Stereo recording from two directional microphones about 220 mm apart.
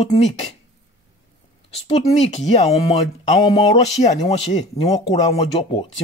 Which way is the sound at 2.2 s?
30° left (ahead or behind).